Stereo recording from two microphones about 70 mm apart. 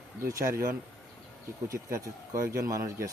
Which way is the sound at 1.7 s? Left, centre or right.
Right.